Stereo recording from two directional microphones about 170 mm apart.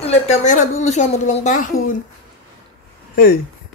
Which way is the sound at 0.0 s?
40° left (ahead or behind).